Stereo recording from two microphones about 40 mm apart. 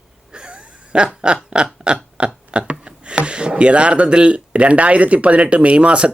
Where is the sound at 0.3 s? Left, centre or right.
Right.